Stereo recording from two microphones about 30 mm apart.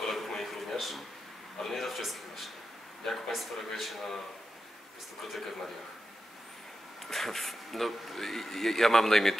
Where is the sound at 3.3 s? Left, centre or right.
Centre.